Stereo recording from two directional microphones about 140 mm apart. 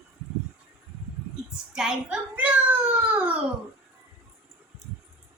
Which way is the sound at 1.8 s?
5° right (ahead or behind).